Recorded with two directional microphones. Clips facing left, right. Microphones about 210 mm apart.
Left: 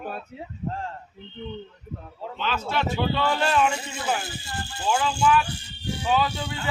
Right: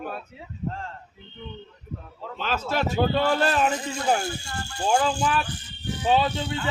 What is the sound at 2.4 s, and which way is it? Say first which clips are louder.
A man's voice: right 1 dB; 40° right (ahead or behind).